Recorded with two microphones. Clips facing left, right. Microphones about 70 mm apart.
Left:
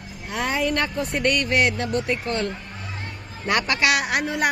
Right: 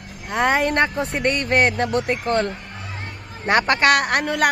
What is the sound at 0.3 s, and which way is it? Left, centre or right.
Speech, right.